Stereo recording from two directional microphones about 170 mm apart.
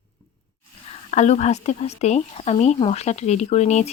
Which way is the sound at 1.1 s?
40° left (ahead or behind).